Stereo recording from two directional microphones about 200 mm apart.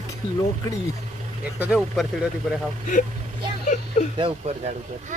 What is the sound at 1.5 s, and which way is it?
Speech, 5° right (ahead or behind).